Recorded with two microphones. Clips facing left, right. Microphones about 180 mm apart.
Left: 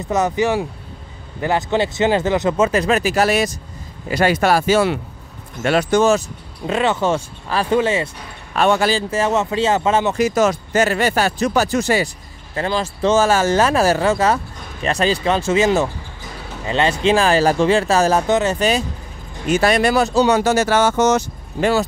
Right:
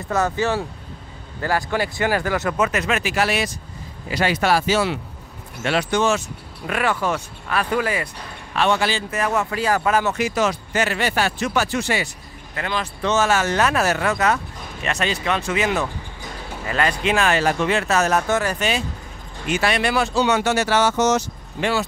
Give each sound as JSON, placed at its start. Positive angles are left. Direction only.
{"t": 0.1, "sound": "speech", "side_deg": 15}
{"t": 6.6, "sound": "speech", "side_deg": 25}
{"t": 8.5, "sound": "speech", "side_deg": 45}
{"t": 9.1, "sound": "speech", "side_deg": 25}
{"t": 10.1, "sound": "speech", "side_deg": 45}
{"t": 12.5, "sound": "speech", "side_deg": 30}
{"t": 18.6, "sound": "speech", "side_deg": 40}